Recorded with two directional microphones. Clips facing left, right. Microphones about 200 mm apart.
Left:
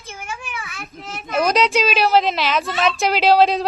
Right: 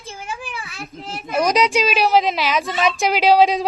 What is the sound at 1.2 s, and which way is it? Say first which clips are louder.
A woman's voice: even; 10° right (ahead or behind).